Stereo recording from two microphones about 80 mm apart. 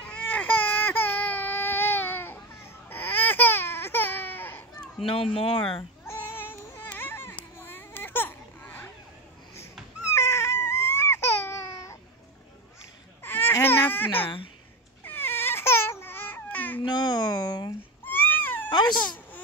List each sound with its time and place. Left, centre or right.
0.0 s baby cry: centre
5.0 s speech: left
6.0 s a sound: left
6.9 s baby cry: left
10.1 s baby cry: left
13.2 s baby cry: left
16.8 s a sound: left
18.0 s a sound: left
18.7 s wail: left